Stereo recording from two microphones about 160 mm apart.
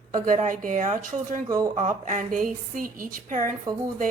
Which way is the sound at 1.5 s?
20° right (ahead or behind).